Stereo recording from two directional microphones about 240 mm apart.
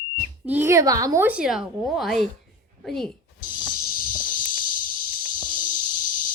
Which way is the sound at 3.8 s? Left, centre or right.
Left.